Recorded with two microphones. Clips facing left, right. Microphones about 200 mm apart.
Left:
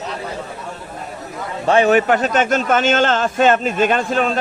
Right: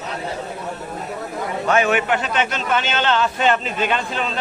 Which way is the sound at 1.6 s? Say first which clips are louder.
Left 5 dB; 35° left (ahead or behind).